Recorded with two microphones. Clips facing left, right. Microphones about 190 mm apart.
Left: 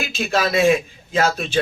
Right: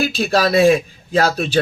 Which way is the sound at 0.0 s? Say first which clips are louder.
Right 5 dB; 35° right (ahead or behind).